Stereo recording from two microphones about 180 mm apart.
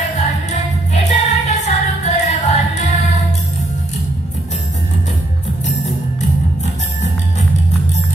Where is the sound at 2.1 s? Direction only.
40° left (ahead or behind).